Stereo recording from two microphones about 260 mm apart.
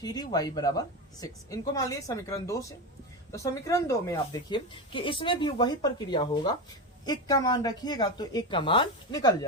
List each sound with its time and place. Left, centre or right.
0.0 s speech: centre